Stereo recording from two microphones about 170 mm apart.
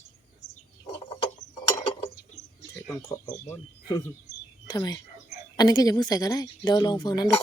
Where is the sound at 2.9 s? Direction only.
20° left (ahead or behind).